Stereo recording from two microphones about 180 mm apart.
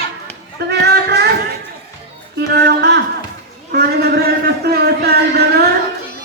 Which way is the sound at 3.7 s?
65° right (ahead or behind).